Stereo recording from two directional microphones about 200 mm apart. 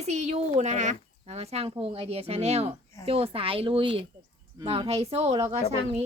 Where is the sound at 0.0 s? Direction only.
35° right (ahead or behind).